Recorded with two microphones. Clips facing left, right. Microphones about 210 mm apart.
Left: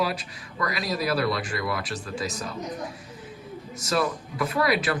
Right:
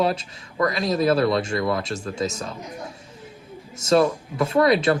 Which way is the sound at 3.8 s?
25° right (ahead or behind).